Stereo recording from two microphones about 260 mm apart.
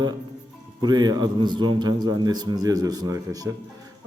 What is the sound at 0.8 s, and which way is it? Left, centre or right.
A man's voice, centre.